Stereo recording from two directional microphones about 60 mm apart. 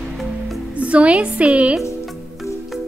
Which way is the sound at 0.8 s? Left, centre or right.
Right.